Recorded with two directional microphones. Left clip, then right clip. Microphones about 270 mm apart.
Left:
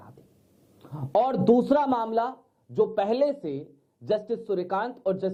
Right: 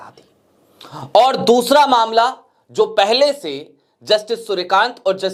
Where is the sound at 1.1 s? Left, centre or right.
Centre.